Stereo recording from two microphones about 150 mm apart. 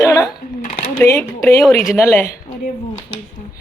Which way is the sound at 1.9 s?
15° left (ahead or behind).